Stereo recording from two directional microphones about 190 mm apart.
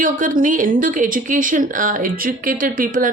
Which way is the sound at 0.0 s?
45° right (ahead or behind).